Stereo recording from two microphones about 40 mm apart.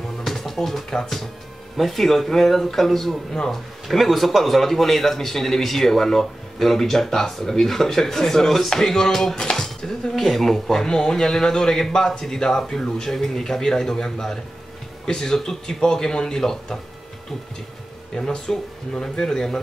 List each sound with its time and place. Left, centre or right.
0.2 s music: centre
0.9 s a man's voice: centre
10.7 s a man's voice: centre
18.1 s a man's voice: centre